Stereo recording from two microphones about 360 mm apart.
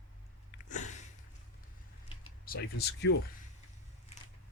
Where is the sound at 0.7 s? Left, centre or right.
Centre.